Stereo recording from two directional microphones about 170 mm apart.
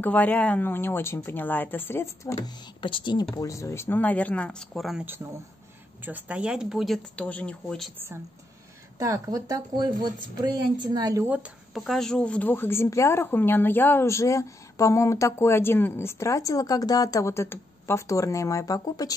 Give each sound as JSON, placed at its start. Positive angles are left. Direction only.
{"t": 0.0, "sound": "speech", "side_deg": 10}
{"t": 2.4, "sound": "speech", "side_deg": 30}
{"t": 5.0, "sound": "speech", "side_deg": -15}
{"t": 8.9, "sound": "speech", "side_deg": -20}
{"t": 11.2, "sound": "speech", "side_deg": -10}